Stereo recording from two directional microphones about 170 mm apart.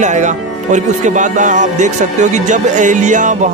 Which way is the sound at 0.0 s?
45° right (ahead or behind).